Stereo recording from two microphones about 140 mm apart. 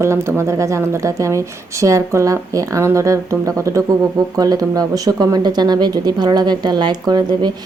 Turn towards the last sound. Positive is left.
turn(degrees=-30)  # may be behind; listen again after turning